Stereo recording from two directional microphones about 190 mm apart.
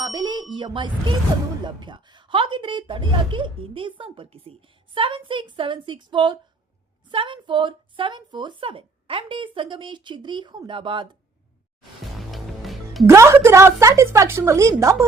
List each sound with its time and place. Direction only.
0.0 s a sound: 25° right (ahead or behind)
0.5 s a woman's voice: 25° right (ahead or behind)
12.3 s music: centre (ahead or behind)
13.1 s a woman's voice: 15° right (ahead or behind)